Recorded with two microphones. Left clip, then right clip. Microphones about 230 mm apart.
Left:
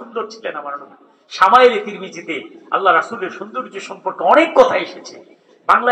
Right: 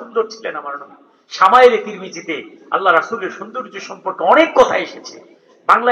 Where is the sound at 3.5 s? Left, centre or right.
Right.